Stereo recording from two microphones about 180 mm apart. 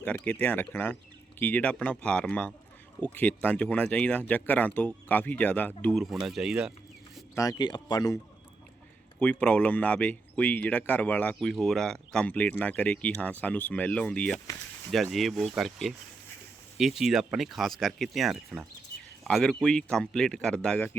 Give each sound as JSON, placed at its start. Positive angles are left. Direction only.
{"t": 0.0, "sound": "speech", "side_deg": 10}
{"t": 7.3, "sound": "speech", "side_deg": 20}
{"t": 9.2, "sound": "speech", "side_deg": 5}